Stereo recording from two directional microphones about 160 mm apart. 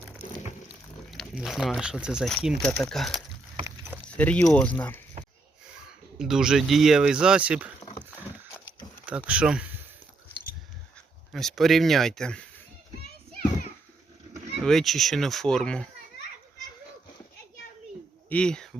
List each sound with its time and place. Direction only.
1.1 s speech: centre (ahead or behind)
6.1 s speech: 5° right (ahead or behind)
7.8 s rowboat: 25° left (ahead or behind)
9.0 s speech: 10° right (ahead or behind)
11.3 s speech: centre (ahead or behind)
14.6 s speech: centre (ahead or behind)
18.3 s speech: 5° left (ahead or behind)